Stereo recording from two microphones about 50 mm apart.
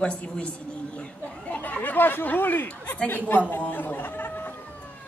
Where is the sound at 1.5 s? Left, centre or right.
Left.